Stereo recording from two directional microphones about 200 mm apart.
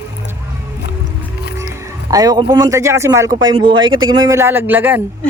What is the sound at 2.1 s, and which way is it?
Speech, 20° right (ahead or behind).